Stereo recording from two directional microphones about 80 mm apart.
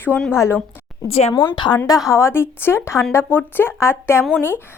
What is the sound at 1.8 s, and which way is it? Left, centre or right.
Speech, left.